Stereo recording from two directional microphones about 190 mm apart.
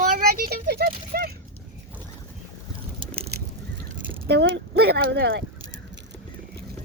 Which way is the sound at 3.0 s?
30° right (ahead or behind).